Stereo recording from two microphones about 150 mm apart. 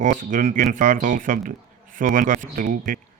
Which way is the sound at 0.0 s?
60° right (ahead or behind).